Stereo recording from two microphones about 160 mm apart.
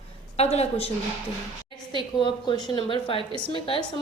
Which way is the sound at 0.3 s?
40° left (ahead or behind).